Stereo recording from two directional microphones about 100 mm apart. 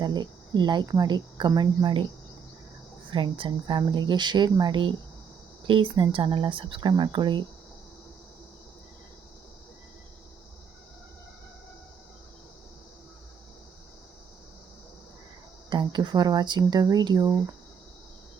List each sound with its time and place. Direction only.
0.0 s speech: 45° right (ahead or behind)
3.1 s speech: 60° right (ahead or behind)
15.7 s speech: 50° right (ahead or behind)